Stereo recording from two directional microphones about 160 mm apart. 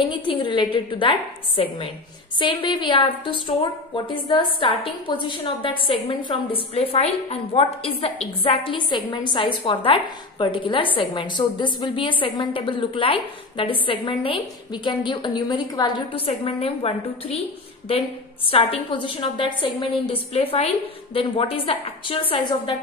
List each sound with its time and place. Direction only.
0.1 s a woman's voice: 30° left (ahead or behind)
2.3 s a woman's voice: 30° left (ahead or behind)
18.5 s a woman's voice: 35° left (ahead or behind)